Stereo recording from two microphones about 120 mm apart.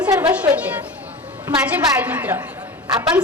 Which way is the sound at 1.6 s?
15° right (ahead or behind).